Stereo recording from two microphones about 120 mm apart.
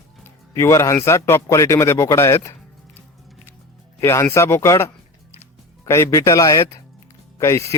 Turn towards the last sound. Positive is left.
turn(degrees=25)  # may be behind; listen again after turning